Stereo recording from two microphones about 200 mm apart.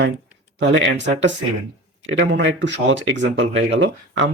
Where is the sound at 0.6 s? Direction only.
65° right (ahead or behind).